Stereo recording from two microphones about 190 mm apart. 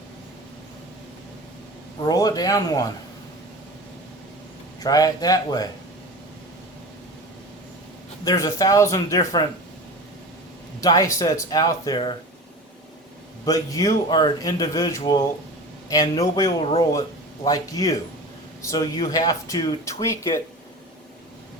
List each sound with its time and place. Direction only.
2.0 s speech: 20° left (ahead or behind)
4.8 s speech: 20° left (ahead or behind)
8.2 s speech: 20° left (ahead or behind)
10.8 s speech: 15° left (ahead or behind)
13.4 s speech: 20° left (ahead or behind)